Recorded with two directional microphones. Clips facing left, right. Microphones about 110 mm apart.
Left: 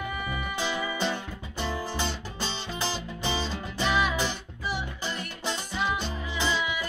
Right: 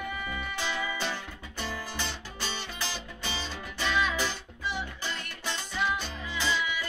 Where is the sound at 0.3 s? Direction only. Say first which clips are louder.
Left 5 dB; 15° left (ahead or behind).